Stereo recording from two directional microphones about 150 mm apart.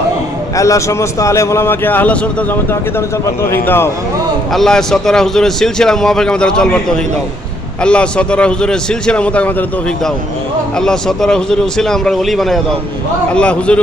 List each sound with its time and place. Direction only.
0.5 s a man's voice: 20° left (ahead or behind)
3.5 s speech: 15° left (ahead or behind)
4.5 s a man's voice: 5° left (ahead or behind)